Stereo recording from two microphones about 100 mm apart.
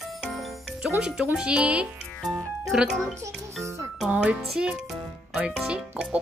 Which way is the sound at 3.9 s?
10° right (ahead or behind).